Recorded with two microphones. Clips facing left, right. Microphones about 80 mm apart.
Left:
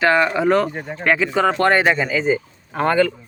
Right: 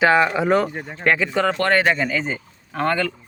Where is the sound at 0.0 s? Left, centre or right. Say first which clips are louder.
Even; centre.